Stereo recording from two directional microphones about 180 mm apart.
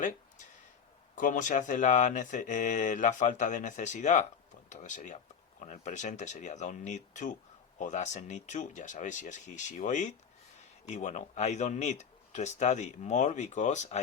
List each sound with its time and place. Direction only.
1.1 s speech: 45° left (ahead or behind)